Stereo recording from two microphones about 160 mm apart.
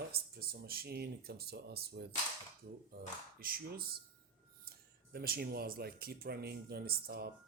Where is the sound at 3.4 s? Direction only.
70° right (ahead or behind).